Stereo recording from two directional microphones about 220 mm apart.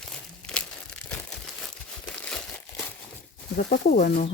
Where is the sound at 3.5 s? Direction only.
40° left (ahead or behind).